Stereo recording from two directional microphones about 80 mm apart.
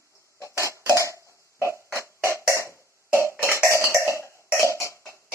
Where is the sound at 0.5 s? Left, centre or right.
Right.